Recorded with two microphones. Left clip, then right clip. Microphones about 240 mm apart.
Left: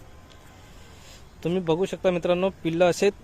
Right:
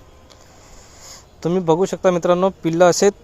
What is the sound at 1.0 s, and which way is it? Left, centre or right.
A man's voice, right.